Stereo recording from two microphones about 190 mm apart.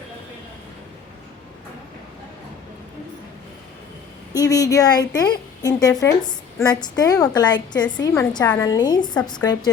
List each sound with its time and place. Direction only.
4.4 s a woman's voice: 20° left (ahead or behind)